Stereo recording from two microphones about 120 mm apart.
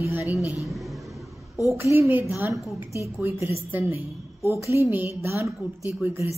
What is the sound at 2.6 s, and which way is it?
Speech, 25° left (ahead or behind).